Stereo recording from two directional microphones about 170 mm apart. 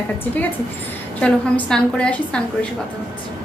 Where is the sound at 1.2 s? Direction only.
5° left (ahead or behind).